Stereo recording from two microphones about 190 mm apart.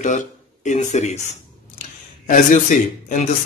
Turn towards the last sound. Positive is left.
turn(degrees=40)  # may be behind; listen again after turning